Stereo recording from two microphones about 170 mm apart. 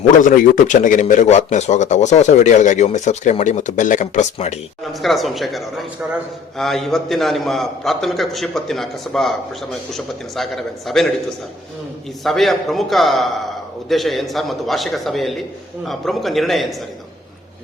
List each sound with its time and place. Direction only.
0.2 s speech: 50° left (ahead or behind)
5.0 s a man's voice: centre (ahead or behind)
12.2 s a man's voice: centre (ahead or behind)